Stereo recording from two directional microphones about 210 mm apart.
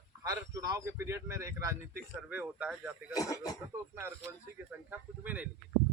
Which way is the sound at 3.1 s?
15° left (ahead or behind).